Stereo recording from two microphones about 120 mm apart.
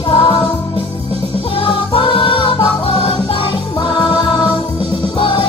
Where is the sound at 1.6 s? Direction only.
45° left (ahead or behind).